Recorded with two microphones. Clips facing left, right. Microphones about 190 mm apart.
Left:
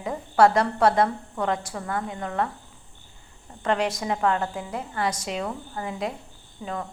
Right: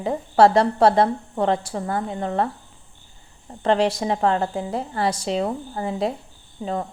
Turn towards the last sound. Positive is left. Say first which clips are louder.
# right 6 dB
turn(degrees=-30)  # may be behind; listen again after turning